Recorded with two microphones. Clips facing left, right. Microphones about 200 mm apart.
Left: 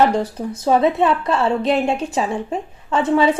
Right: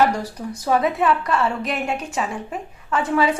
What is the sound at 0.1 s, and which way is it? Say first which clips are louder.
A woman's voice: left 5 dB; 25° left (ahead or behind).